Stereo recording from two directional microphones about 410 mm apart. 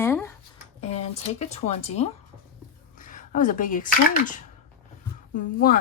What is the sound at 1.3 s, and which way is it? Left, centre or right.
Speech, centre.